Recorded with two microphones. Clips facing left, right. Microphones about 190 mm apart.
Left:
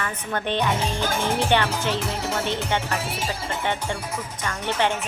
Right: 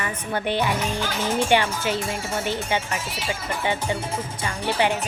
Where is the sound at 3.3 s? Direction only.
30° left (ahead or behind).